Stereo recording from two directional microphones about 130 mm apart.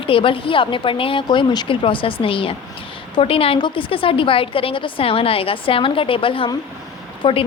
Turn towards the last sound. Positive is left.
turn(degrees=40)  # may be behind; listen again after turning